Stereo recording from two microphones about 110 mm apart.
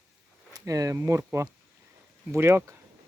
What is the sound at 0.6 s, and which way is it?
Speech, 30° right (ahead or behind).